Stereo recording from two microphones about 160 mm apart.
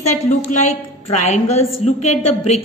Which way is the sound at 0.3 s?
50° left (ahead or behind).